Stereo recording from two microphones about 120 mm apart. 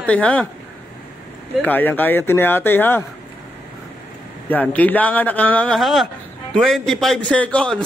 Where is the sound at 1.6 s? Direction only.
15° left (ahead or behind).